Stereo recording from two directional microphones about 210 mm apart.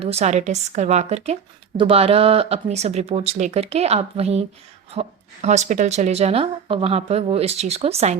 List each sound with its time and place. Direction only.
0.0 s a woman's voice: 30° right (ahead or behind)